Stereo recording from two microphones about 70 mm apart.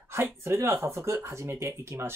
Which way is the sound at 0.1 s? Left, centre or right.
Right.